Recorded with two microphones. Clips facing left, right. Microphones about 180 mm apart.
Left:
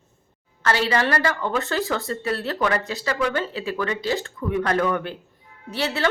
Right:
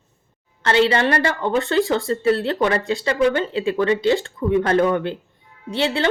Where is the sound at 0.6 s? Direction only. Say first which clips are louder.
Right 5 dB; 25° right (ahead or behind).